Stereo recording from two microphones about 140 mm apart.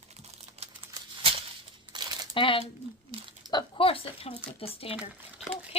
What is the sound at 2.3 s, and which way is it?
Speech, 40° left (ahead or behind).